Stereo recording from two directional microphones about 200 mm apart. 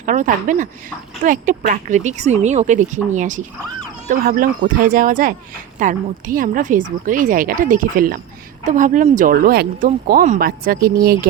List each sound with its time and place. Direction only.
0.0 s speech: 40° right (ahead or behind)
4.8 s speech: 45° right (ahead or behind)